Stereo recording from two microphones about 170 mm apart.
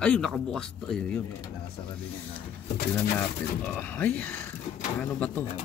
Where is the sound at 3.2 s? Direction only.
10° left (ahead or behind).